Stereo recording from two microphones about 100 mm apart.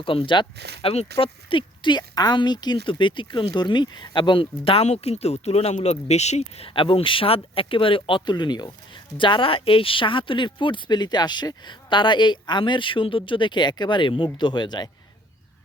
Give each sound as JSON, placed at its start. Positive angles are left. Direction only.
{"t": 0.0, "sound": "speech", "side_deg": 60}
{"t": 9.1, "sound": "speech", "side_deg": 55}